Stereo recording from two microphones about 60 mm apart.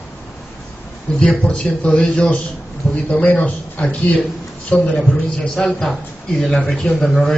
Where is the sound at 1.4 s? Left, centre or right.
Centre; by 4.9 s left.